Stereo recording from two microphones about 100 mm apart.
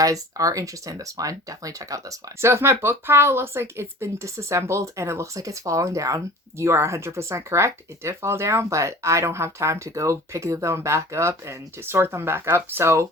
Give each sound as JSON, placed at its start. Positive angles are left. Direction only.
{"t": 0.0, "sound": "speech", "side_deg": -35}